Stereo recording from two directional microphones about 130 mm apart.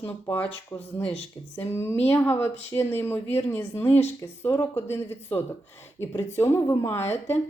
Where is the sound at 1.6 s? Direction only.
15° left (ahead or behind).